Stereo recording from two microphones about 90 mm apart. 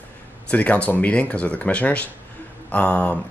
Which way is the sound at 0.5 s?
15° left (ahead or behind).